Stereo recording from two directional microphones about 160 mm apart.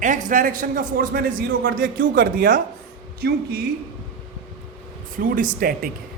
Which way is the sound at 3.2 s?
80° right.